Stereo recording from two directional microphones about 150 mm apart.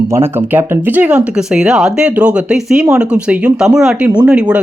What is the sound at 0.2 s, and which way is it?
Speech, 10° right (ahead or behind).